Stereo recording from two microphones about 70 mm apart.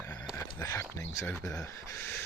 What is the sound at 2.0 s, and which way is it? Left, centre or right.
Speech, left.